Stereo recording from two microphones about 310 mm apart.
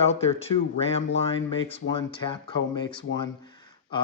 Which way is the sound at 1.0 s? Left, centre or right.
Left.